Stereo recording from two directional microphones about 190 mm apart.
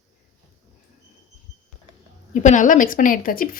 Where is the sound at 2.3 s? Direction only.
40° left (ahead or behind).